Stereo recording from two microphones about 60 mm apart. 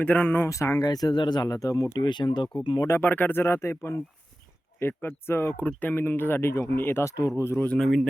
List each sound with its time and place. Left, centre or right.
0.0 s speech: left
0.3 s speech: left
0.8 s speech: left
2.6 s speech: left
3.0 s speech: left
5.0 s speech: left
7.0 s speech: left
7.8 s speech: centre